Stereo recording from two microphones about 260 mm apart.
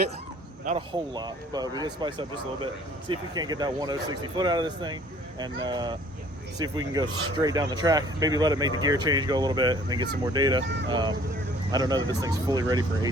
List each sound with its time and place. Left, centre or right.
0.6 s a man's voice: right